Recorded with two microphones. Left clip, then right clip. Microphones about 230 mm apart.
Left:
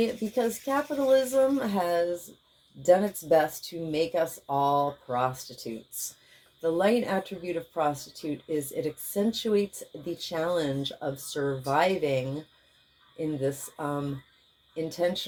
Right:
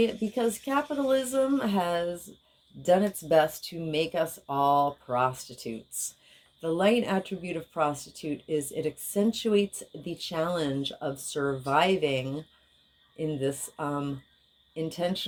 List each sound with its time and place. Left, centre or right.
0.0 s speech: right